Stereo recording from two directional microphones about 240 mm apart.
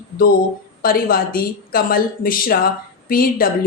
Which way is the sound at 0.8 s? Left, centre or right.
Left.